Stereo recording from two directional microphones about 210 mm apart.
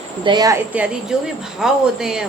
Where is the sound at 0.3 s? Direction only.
20° right (ahead or behind).